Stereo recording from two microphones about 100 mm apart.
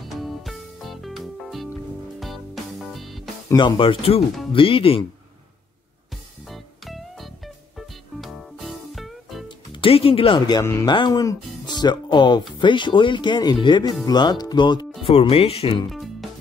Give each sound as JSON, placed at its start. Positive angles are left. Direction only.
{"t": 0.0, "sound": "music", "side_deg": 0}
{"t": 3.5, "sound": "speech", "side_deg": 55}
{"t": 6.4, "sound": "music", "side_deg": 0}
{"t": 9.8, "sound": "speech", "side_deg": 70}
{"t": 10.6, "sound": "speech", "side_deg": 30}
{"t": 10.9, "sound": "speech", "side_deg": 45}
{"t": 15.0, "sound": "speech", "side_deg": 75}
{"t": 15.9, "sound": "music", "side_deg": 0}